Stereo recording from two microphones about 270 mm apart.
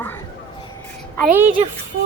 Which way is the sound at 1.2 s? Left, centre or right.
Centre.